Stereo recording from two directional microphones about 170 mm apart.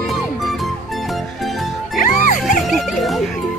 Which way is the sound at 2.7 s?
Centre (ahead or behind).